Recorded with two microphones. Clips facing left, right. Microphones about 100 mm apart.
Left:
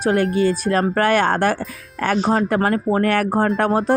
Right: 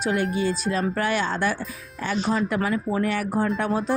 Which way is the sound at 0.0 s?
45° left (ahead or behind).